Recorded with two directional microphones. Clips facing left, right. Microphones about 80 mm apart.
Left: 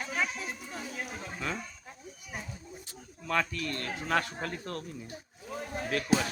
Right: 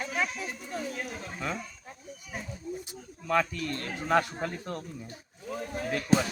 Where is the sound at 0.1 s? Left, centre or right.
Centre.